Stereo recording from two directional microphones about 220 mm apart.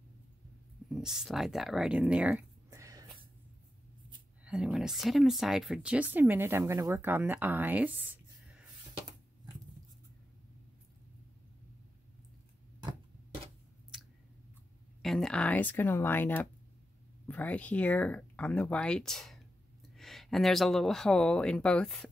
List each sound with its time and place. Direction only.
0.8 s speech: centre (ahead or behind)
4.5 s speech: 5° right (ahead or behind)
15.0 s speech: centre (ahead or behind)